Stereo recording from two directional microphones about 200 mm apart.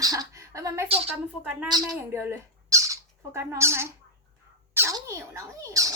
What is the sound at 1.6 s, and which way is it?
A woman's voice, 20° right (ahead or behind).